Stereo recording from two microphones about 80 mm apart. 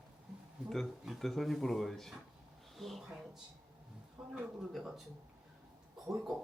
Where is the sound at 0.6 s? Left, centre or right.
Centre.